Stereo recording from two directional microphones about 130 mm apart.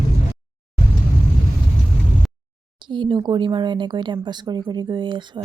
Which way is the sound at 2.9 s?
35° right (ahead or behind).